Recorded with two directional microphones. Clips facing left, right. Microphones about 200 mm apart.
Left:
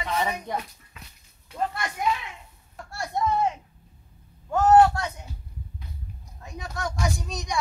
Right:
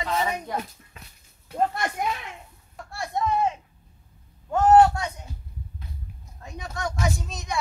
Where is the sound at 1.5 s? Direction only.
45° right (ahead or behind).